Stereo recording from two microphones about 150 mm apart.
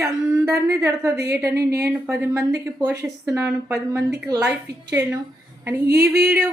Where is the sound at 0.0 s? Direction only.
20° right (ahead or behind).